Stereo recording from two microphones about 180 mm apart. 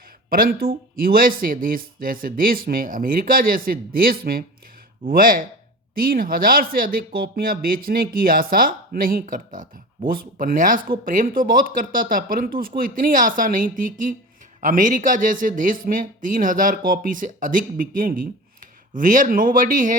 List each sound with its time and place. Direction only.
0.3 s speech: 55° right (ahead or behind)